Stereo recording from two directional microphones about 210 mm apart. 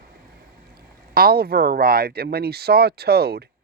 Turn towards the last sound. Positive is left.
turn(degrees=-50)  # may be behind; listen again after turning